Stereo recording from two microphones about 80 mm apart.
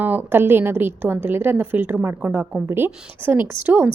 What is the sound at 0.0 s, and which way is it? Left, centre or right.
A woman's voice, right.